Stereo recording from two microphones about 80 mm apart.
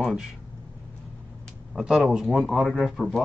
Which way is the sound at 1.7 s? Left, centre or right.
Centre.